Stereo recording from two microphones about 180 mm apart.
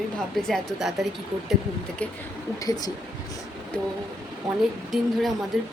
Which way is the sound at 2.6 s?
20° left (ahead or behind).